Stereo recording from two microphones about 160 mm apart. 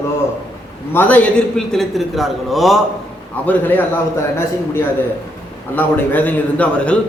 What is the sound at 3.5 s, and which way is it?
Speech, 10° left (ahead or behind).